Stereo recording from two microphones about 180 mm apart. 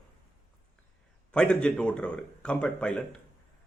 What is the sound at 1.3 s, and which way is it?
A man's voice, 5° left (ahead or behind).